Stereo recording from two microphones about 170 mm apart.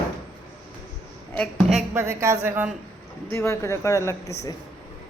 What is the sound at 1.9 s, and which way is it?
Speech, 15° right (ahead or behind).